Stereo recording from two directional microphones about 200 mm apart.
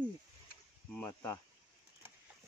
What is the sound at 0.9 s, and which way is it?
Speech, 10° left (ahead or behind).